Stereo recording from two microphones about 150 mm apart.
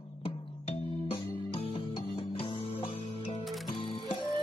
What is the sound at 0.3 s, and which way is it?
Music, 35° left (ahead or behind).